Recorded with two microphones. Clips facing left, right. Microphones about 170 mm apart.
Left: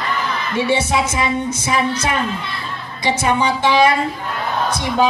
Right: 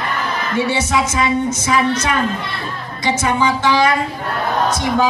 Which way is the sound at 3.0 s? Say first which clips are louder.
Even; 20° left (ahead or behind).